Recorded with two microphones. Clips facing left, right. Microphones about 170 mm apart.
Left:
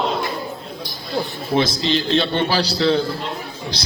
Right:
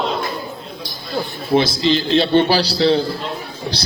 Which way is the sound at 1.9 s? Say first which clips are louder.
Right 8 dB; 35° right (ahead or behind).